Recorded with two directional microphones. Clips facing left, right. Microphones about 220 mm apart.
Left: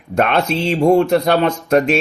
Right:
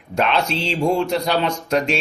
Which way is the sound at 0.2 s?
55° left (ahead or behind).